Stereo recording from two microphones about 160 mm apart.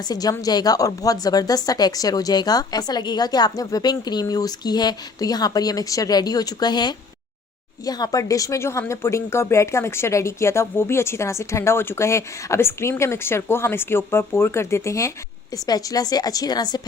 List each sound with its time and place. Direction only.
0.0 s a woman's voice: 25° left (ahead or behind)